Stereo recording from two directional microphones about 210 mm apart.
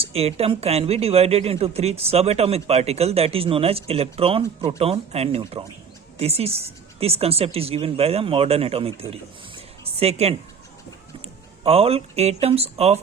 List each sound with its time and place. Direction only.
0.0 s speech: 30° right (ahead or behind)
11.6 s speech: 30° right (ahead or behind)